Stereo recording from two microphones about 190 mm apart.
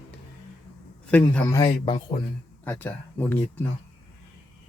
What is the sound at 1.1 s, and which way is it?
Speech, 5° left (ahead or behind).